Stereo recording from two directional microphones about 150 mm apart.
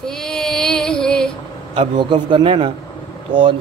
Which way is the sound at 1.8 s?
35° right (ahead or behind).